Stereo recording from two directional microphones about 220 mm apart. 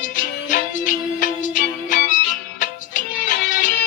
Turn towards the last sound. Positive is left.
turn(degrees=35)  # may be behind; listen again after turning